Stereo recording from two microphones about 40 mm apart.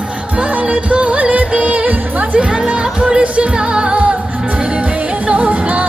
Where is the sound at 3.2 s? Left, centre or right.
Right.